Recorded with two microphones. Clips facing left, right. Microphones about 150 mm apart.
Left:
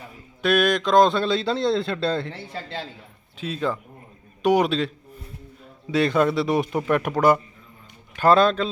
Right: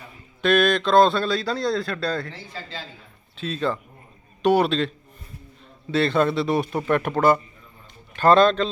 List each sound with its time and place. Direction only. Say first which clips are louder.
0.4 s a man's voice: right 1 dB; 10° left (ahead or behind)
3.3 s speech: right 1 dB; 10° left (ahead or behind)
5.9 s speech: left 1 dB; 10° left (ahead or behind)